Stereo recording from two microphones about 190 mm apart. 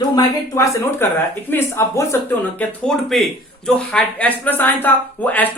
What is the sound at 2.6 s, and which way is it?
Speech, 5° left (ahead or behind).